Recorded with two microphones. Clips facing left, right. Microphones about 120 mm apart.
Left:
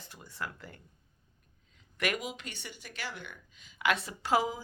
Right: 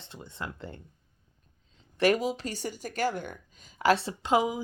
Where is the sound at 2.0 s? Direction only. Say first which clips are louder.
Right 9 dB; 35° right (ahead or behind).